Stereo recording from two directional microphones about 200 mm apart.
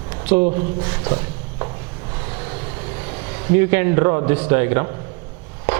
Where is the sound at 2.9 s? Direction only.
30° right (ahead or behind).